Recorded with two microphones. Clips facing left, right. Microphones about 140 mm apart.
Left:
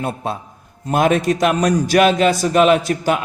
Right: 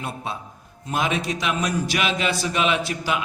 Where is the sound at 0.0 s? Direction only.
45° left (ahead or behind).